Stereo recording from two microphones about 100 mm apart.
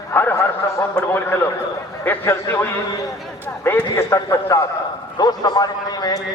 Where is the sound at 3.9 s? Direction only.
25° left (ahead or behind).